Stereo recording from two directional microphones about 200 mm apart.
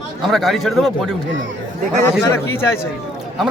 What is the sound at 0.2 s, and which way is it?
Speech, centre (ahead or behind).